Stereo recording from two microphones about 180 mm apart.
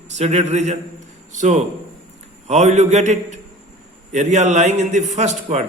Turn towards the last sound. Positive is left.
turn(degrees=-40)  # may be behind; listen again after turning